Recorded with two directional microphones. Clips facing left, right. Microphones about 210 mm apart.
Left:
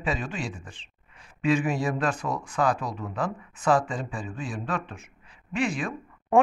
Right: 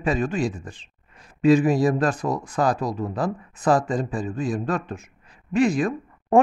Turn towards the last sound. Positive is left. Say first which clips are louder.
# right 5 dB
turn(degrees=-40)  # may be behind; listen again after turning